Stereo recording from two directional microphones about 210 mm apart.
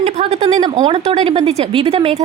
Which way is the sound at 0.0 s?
30° right (ahead or behind).